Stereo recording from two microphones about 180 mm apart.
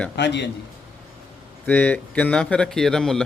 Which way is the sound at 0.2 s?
75° left (ahead or behind).